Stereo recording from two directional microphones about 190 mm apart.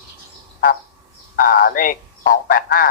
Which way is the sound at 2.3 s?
45° left (ahead or behind).